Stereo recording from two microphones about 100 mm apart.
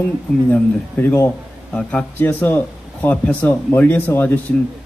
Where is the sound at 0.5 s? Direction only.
20° left (ahead or behind).